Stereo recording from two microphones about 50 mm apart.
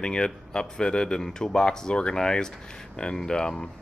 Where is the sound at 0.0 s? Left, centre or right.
Centre.